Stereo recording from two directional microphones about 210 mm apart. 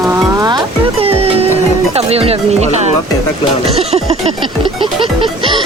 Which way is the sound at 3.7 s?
30° right (ahead or behind).